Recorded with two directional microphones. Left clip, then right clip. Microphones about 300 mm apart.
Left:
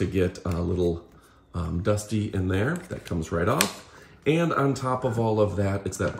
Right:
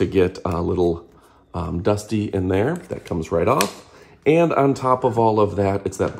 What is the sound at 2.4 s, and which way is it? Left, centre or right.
Speech, right.